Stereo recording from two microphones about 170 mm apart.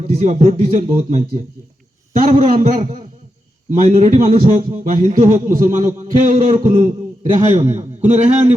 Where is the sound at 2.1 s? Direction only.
55° right (ahead or behind).